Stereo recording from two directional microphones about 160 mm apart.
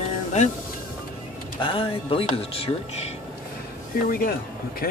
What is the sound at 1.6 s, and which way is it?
Speech, 35° left (ahead or behind).